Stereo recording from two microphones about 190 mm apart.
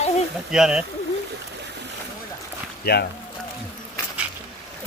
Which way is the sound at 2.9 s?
60° left (ahead or behind).